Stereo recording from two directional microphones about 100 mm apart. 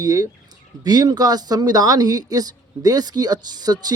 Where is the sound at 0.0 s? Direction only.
35° right (ahead or behind).